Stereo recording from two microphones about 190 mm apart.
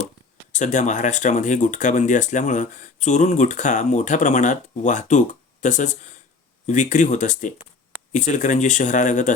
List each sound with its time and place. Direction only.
0.5 s speech: 40° left (ahead or behind)